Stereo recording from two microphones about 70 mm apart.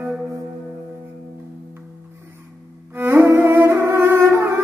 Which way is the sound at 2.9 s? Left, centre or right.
Right.